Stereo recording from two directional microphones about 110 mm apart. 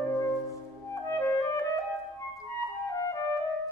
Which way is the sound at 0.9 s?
30° left (ahead or behind).